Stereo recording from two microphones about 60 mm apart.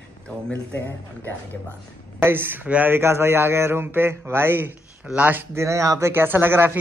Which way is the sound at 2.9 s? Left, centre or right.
Right.